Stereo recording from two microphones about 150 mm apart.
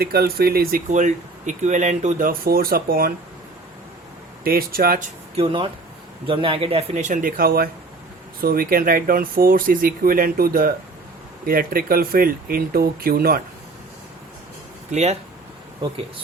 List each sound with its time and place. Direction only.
0.0 s speech: 90° right
0.9 s speech: 55° right (ahead or behind); by 3.1 s 85° right
4.4 s speech: 80° right
5.4 s speech: 35° right (ahead or behind); by 7.7 s 90° right
8.4 s speech: 75° right (ahead or behind)